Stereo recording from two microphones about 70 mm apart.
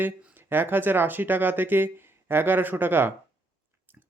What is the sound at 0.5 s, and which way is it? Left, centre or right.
Speech, right.